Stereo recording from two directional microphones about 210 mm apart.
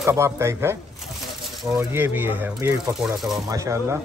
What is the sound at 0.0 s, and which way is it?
Speech, 15° right (ahead or behind).